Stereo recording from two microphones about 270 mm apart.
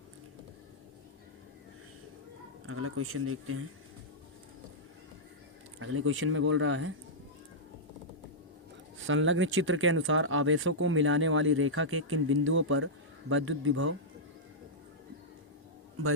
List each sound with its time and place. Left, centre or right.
2.6 s speech: right
5.8 s speech: right
9.0 s speech: right